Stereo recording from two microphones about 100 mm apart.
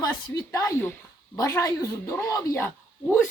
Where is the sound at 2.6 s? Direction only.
25° left (ahead or behind).